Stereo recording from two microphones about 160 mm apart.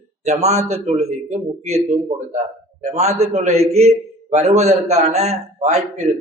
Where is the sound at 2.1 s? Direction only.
35° right (ahead or behind).